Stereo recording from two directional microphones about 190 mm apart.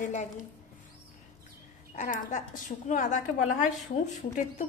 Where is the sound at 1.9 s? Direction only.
40° left (ahead or behind).